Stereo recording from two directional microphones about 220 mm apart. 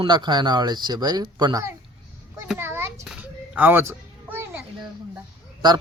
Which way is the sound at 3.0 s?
5° right (ahead or behind).